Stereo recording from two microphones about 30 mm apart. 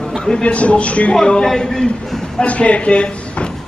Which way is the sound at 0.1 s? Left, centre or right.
Left.